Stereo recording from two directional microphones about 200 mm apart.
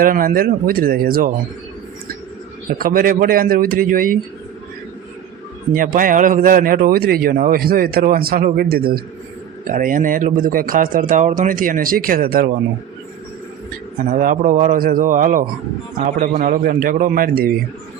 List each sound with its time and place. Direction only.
0.0 s a man's voice: 45° right (ahead or behind)
2.7 s a man's voice: 45° right (ahead or behind)
5.7 s a man's voice: 45° right (ahead or behind)
14.1 s a man's voice: 40° right (ahead or behind)